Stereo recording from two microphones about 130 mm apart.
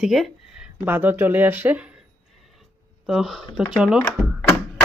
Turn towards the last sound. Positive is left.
turn(degrees=20)  # may be behind; listen again after turning